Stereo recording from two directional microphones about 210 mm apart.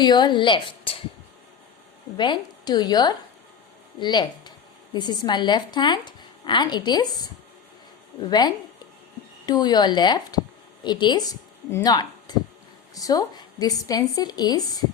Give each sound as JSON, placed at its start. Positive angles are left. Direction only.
{"t": 0.0, "sound": "speech", "side_deg": 20}
{"t": 2.1, "sound": "speech", "side_deg": 20}
{"t": 8.3, "sound": "a woman's voice", "side_deg": 20}